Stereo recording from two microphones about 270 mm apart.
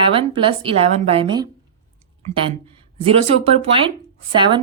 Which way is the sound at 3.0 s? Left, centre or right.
Right.